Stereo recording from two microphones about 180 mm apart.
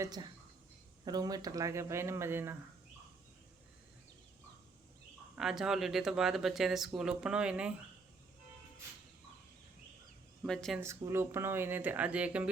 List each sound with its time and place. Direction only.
0.0 s a woman's voice: 20° right (ahead or behind)
5.4 s speech: 5° right (ahead or behind)
10.4 s speech: 5° left (ahead or behind)
10.8 s speech: 15° right (ahead or behind)